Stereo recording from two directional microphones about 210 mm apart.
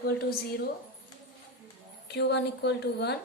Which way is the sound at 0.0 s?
45° left (ahead or behind).